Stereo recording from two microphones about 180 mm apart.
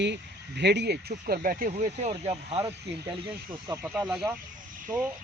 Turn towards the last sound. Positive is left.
turn(degrees=-10)  # may be behind; listen again after turning